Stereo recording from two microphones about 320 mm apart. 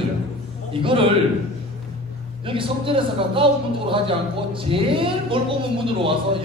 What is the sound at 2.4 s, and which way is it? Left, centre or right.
A man's voice, centre.